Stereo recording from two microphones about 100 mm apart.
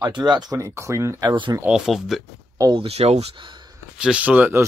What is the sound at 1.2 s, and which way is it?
Speech, 55° right (ahead or behind).